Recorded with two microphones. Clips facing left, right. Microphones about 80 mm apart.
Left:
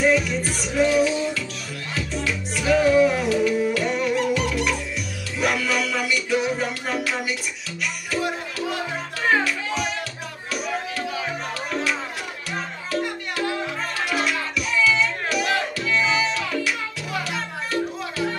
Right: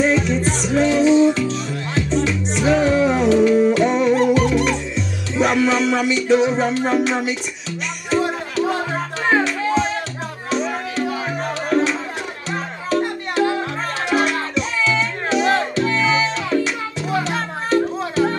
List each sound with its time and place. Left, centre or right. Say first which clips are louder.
0.0 s music: right 3 dB; right
8.6 s music: right 4 dB; right
9.3 s music: right 5 dB; right
12.4 s music: right 7 dB; right